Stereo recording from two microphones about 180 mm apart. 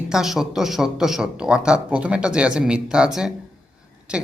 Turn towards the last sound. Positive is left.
turn(degrees=-5)  # may be behind; listen again after turning